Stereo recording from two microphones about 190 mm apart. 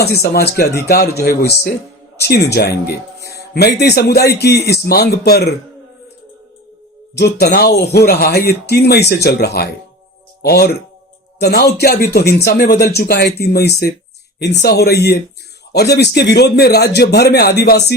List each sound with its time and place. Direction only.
0.0 s speech: 55° left (ahead or behind)
2.1 s speech: 60° left (ahead or behind)
7.3 s a man's voice: 55° left (ahead or behind)